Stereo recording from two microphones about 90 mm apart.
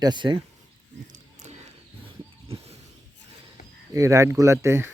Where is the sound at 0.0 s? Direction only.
60° right (ahead or behind).